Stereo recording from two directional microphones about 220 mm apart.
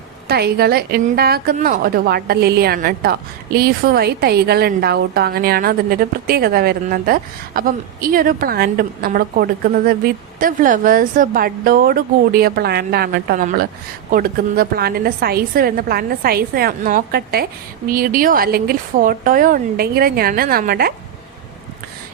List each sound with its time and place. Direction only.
0.3 s a woman's voice: 45° right (ahead or behind)